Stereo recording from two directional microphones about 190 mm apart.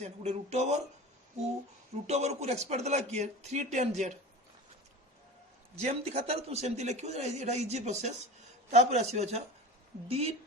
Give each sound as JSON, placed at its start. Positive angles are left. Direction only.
{"t": 0.0, "sound": "speech", "side_deg": -35}
{"t": 2.0, "sound": "speech", "side_deg": -35}
{"t": 5.8, "sound": "speech", "side_deg": -35}